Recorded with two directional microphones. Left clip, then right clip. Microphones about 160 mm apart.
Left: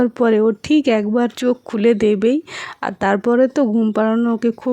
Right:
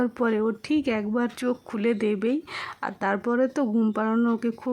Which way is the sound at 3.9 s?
35° left (ahead or behind).